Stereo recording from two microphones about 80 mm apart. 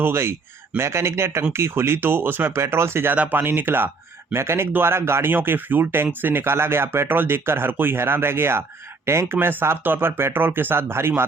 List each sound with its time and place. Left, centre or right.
0.0 s speech: right